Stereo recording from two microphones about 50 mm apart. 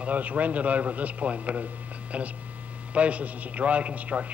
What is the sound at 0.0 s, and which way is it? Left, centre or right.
A man's voice, right.